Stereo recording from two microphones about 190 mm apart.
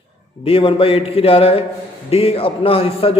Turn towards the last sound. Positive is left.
turn(degrees=30)  # may be behind; listen again after turning